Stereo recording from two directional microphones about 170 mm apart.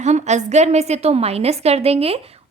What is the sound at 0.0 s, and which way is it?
A woman's voice, 40° right (ahead or behind).